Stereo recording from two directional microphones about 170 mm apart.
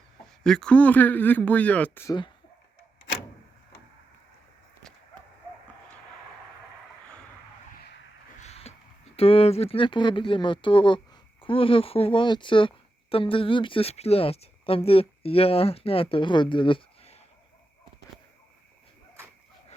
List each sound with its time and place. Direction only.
0.4 s speech: 5° left (ahead or behind)
2.0 s speech: 25° left (ahead or behind)
8.4 s a sound: 40° left (ahead or behind)
9.1 s speech: 35° left (ahead or behind)